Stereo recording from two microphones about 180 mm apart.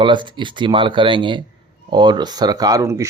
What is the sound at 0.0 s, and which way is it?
Speech, 25° right (ahead or behind).